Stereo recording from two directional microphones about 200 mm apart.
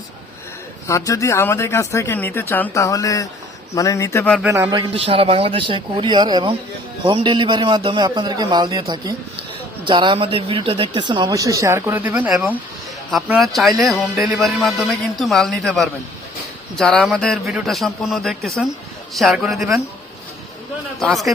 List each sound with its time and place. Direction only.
0.9 s speech: 15° left (ahead or behind)
4.4 s speech: 15° right (ahead or behind)
21.0 s speech: centre (ahead or behind)